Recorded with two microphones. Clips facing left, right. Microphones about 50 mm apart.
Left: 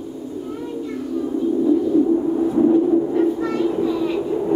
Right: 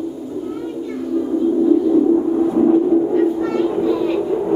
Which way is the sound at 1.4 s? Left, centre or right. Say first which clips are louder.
Right 3 dB; centre.